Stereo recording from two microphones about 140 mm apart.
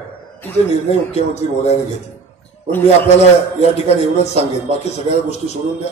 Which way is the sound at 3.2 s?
50° left (ahead or behind).